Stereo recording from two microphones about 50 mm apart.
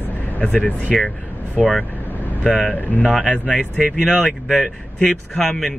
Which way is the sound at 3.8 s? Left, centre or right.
Centre.